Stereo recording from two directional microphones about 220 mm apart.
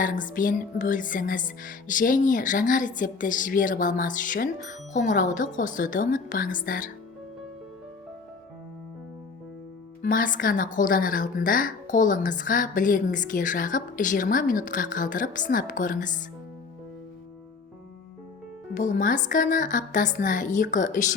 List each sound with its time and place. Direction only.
0.0 s a woman's voice: 35° left (ahead or behind)
10.0 s a woman's voice: 40° left (ahead or behind)
18.7 s a woman's voice: 35° left (ahead or behind)